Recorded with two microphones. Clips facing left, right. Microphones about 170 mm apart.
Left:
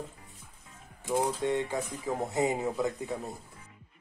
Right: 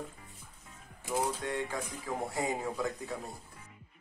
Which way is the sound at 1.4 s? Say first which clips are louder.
Left 6 dB; 20° left (ahead or behind).